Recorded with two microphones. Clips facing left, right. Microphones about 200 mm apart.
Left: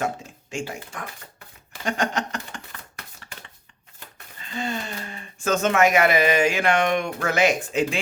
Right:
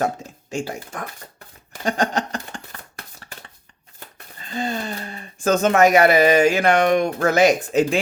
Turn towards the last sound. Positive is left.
turn(degrees=-40)  # may be behind; listen again after turning